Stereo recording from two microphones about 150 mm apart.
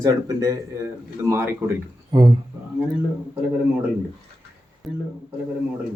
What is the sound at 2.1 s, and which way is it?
Speech, 30° right (ahead or behind).